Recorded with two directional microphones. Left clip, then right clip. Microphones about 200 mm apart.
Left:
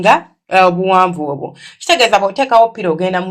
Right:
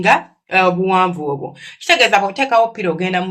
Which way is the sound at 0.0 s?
25° left (ahead or behind).